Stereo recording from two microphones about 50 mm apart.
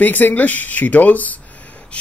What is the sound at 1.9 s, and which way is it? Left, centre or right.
Gasp, left.